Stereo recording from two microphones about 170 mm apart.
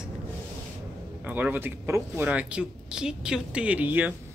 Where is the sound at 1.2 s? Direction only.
10° right (ahead or behind).